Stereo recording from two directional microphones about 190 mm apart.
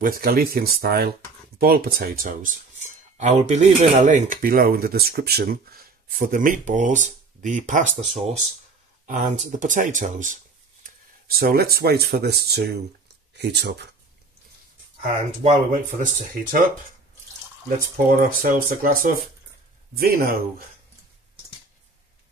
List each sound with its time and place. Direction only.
0.0 s speech: 50° right (ahead or behind)
9.0 s speech: 40° right (ahead or behind); by 13.8 s 60° right (ahead or behind)
15.0 s speech: 45° right (ahead or behind)
17.9 s speech: 45° right (ahead or behind)